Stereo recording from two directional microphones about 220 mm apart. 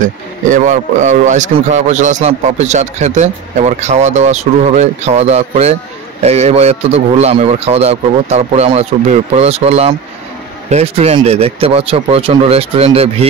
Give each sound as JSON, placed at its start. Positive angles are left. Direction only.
{"t": 0.0, "sound": "a man's voice", "side_deg": -35}